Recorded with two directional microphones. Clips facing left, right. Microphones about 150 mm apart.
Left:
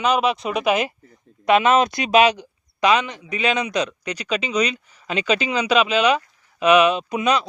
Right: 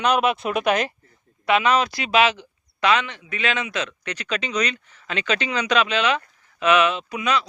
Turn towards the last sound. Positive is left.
turn(degrees=20)  # may be behind; listen again after turning